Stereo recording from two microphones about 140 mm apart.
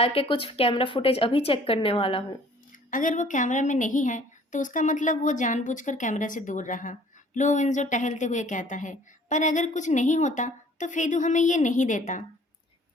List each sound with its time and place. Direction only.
0.0 s a woman's voice: 40° left (ahead or behind)
2.9 s a woman's voice: 70° left (ahead or behind)